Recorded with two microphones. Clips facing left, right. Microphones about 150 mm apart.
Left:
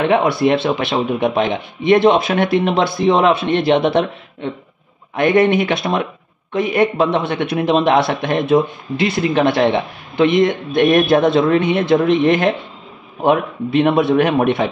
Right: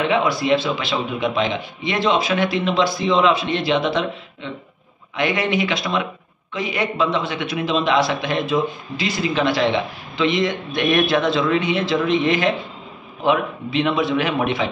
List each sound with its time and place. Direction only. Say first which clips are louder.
0.0 s a man's voice: left 5 dB; 55° left (ahead or behind)